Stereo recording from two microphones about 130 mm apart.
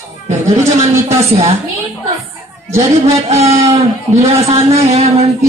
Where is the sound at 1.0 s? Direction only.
50° right (ahead or behind).